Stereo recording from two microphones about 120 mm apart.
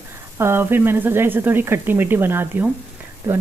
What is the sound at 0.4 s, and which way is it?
Speech, 20° right (ahead or behind).